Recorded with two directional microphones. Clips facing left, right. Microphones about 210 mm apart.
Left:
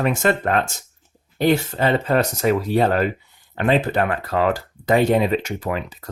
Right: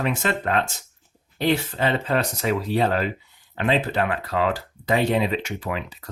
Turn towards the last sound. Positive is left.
turn(degrees=45)  # may be behind; listen again after turning